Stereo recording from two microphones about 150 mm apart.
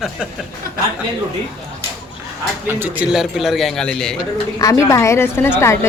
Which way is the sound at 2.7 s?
15° right (ahead or behind).